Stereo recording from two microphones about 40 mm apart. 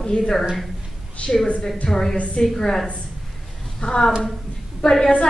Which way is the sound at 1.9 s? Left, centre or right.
Centre.